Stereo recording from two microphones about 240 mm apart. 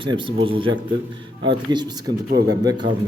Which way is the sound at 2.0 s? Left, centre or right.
Right.